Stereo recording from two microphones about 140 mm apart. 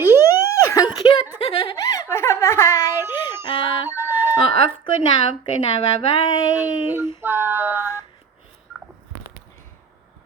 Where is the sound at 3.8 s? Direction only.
15° right (ahead or behind).